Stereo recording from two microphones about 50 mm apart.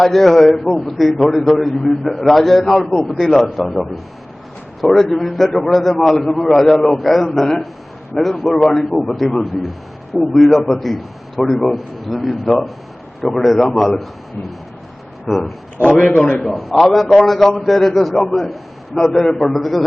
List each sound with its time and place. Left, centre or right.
0.0 s a man's voice: centre
15.3 s a man's voice: centre
16.0 s a man's voice: centre
16.6 s a man's voice: centre